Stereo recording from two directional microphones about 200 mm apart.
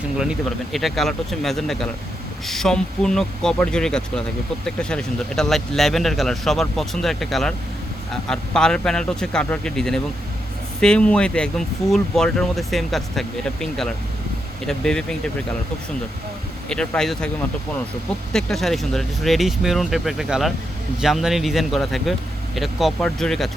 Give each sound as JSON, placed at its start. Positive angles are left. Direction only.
{"t": 0.2, "sound": "speech", "side_deg": 0}
{"t": 16.6, "sound": "speech", "side_deg": 5}
{"t": 18.3, "sound": "speech", "side_deg": 0}